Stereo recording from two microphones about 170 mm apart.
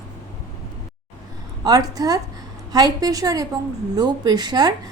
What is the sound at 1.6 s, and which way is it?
A woman's voice, 20° right (ahead or behind).